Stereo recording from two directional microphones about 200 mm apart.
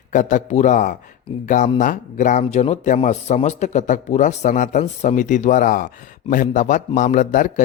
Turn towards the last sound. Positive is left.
turn(degrees=40)  # may be behind; listen again after turning